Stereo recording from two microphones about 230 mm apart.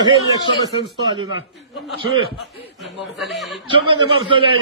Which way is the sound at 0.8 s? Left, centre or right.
Centre.